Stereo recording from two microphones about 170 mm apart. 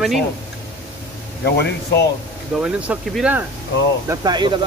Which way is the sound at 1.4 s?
75° left (ahead or behind).